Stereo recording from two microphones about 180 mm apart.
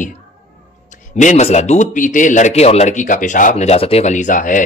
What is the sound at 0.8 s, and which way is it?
A man's voice, 45° left (ahead or behind).